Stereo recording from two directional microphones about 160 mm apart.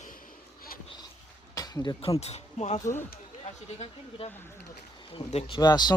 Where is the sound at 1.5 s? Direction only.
20° left (ahead or behind).